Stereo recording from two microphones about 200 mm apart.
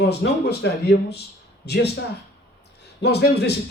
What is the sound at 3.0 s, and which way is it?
Speech, 55° left (ahead or behind).